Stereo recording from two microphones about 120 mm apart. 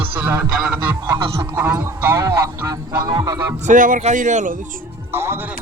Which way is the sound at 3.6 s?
90° right.